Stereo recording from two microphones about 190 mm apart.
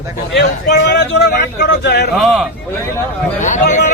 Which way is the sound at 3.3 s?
40° left (ahead or behind).